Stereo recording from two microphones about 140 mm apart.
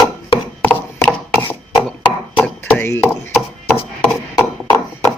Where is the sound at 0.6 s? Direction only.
10° left (ahead or behind).